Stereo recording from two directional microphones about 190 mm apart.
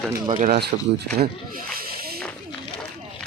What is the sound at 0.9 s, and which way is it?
Speech, 55° right (ahead or behind).